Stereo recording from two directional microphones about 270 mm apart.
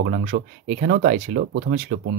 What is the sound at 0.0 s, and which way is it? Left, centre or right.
Speech, right.